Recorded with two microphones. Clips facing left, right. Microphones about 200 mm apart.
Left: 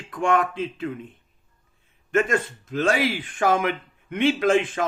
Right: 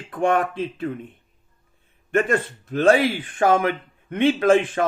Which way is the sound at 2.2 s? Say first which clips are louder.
Right 2 dB; 60° right (ahead or behind).